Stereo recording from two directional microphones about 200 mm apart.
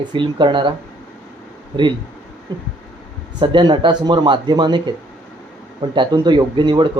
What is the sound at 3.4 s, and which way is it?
Speech, 25° right (ahead or behind).